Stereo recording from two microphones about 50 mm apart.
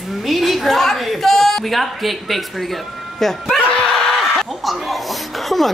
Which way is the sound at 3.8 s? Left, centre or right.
Centre.